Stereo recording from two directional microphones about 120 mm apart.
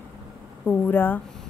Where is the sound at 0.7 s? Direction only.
15° left (ahead or behind).